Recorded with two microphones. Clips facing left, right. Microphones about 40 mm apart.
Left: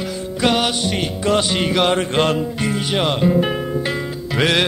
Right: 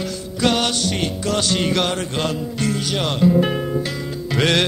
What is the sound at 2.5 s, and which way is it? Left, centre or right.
Music, left.